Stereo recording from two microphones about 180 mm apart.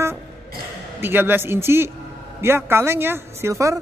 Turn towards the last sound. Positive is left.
turn(degrees=-15)  # may be behind; listen again after turning